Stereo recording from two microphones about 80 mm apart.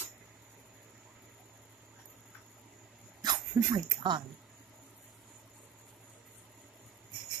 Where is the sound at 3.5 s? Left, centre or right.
Right.